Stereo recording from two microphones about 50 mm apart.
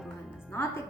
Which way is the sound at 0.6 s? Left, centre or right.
Left.